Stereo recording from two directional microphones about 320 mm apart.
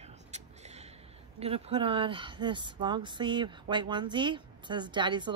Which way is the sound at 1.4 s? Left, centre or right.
Centre.